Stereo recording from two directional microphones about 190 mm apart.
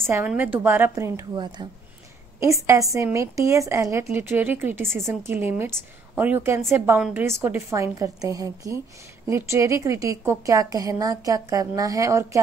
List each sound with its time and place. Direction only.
0.1 s a woman's voice: 10° right (ahead or behind)